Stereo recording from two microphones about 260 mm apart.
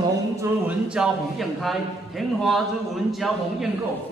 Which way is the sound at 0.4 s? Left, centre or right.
Centre.